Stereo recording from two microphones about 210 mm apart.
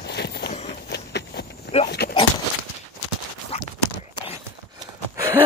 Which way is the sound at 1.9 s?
50° left (ahead or behind).